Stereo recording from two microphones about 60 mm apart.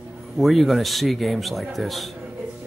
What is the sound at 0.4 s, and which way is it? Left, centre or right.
A man's voice, centre.